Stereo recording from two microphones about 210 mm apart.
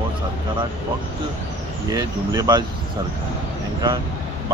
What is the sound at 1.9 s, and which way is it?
Speech, 15° right (ahead or behind).